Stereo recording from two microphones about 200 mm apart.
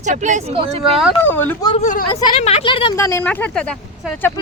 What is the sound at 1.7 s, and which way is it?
Speech, 35° left (ahead or behind).